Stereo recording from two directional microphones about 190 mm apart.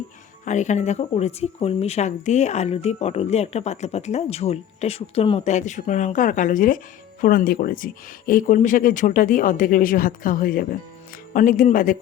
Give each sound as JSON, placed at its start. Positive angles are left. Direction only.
{"t": 0.4, "sound": "speech", "side_deg": 40}